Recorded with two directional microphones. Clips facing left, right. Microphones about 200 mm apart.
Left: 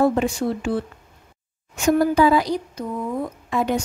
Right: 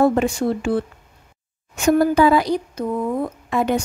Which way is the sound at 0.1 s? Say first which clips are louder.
Right 2 dB; 55° right (ahead or behind).